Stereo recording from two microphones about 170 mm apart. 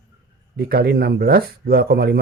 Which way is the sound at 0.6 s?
70° right (ahead or behind).